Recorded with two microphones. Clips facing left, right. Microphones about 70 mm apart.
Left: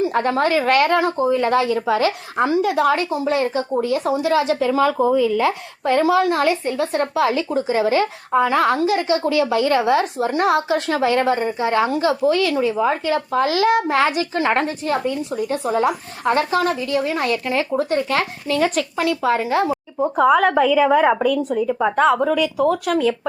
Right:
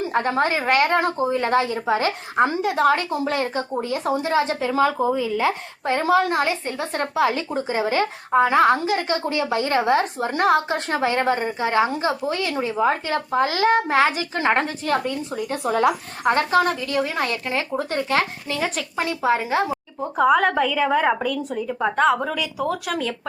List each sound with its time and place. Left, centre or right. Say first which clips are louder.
0.3 s speech: left 3 dB; right
1.3 s a woman's voice: left 3 dB; right
6.3 s speech: left 3 dB; right
6.7 s a woman's voice: left 5 dB; right
12.8 s a woman's voice: left 2 dB; right
14.8 s a woman's voice: left 2 dB; right
15.6 s speech: right 1 dB; right
16.2 s a woman's voice: even; right
20.1 s a woman's voice: left 2 dB; centre